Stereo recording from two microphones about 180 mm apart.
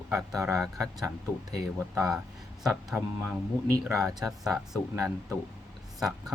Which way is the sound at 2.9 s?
10° right (ahead or behind).